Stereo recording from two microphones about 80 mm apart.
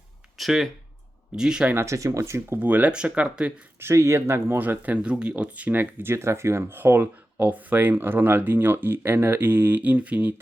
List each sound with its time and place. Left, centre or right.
0.3 s speech: centre
1.7 s speech: right
2.6 s speech: right
3.8 s speech: right; by 10.3 s centre